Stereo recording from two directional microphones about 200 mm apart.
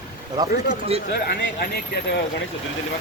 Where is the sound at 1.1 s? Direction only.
50° left (ahead or behind).